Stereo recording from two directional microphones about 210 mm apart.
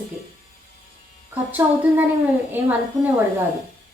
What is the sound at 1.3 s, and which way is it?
A woman's voice, 10° right (ahead or behind).